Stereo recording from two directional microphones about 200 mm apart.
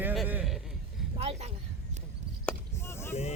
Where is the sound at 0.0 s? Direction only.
10° right (ahead or behind).